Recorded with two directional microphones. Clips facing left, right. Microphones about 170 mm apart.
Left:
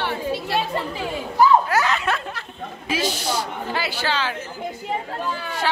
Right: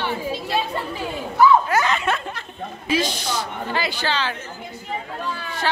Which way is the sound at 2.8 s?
10° left (ahead or behind).